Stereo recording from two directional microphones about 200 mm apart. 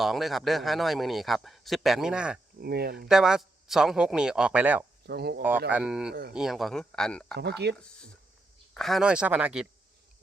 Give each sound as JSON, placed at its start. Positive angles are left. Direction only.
{"t": 0.0, "sound": "a man's voice", "side_deg": 0}
{"t": 2.6, "sound": "speech", "side_deg": -50}
{"t": 3.1, "sound": "a man's voice", "side_deg": -5}
{"t": 5.0, "sound": "speech", "side_deg": -55}
{"t": 5.4, "sound": "a man's voice", "side_deg": -10}
{"t": 7.3, "sound": "speech", "side_deg": -55}
{"t": 8.7, "sound": "a man's voice", "side_deg": 0}